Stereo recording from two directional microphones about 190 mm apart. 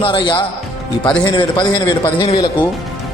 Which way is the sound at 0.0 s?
25° left (ahead or behind).